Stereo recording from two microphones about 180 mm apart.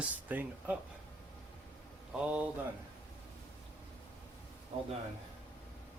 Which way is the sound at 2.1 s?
10° right (ahead or behind).